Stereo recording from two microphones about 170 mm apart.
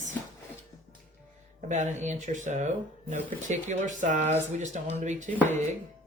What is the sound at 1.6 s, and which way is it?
Speech, 45° right (ahead or behind).